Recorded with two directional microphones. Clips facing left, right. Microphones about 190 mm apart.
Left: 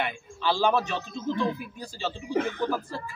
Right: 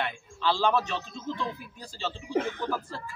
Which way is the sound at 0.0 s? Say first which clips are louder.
Left 1 dB; 10° left (ahead or behind).